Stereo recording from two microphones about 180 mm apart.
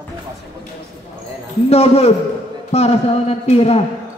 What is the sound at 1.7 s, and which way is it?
A man's voice, 35° left (ahead or behind).